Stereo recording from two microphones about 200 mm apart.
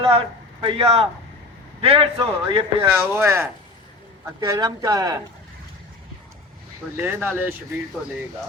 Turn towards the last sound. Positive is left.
turn(degrees=-10)  # may be behind; listen again after turning